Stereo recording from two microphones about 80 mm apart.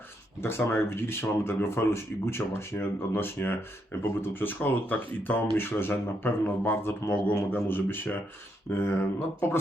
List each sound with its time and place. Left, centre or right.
0.4 s speech: left